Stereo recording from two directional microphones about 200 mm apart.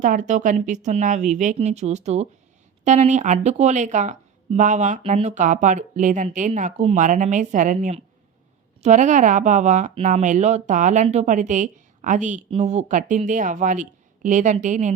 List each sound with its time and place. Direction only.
0.0 s speech: 40° right (ahead or behind)